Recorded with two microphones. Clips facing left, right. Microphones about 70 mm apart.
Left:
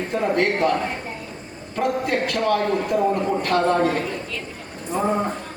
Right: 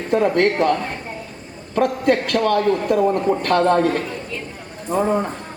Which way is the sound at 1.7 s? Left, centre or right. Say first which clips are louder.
Right 5 dB; right.